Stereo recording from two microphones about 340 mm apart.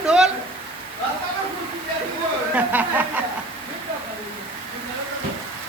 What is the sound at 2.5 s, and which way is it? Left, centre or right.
Speech, centre.